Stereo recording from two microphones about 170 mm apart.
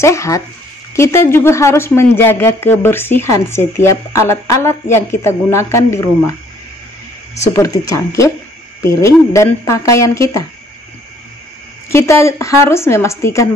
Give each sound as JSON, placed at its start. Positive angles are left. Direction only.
{"t": 0.0, "sound": "speech", "side_deg": 15}
{"t": 7.5, "sound": "speech", "side_deg": 20}
{"t": 11.9, "sound": "speech", "side_deg": 15}